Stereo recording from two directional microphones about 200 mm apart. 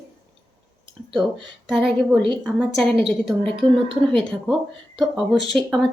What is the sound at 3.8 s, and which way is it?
Speech, 25° right (ahead or behind).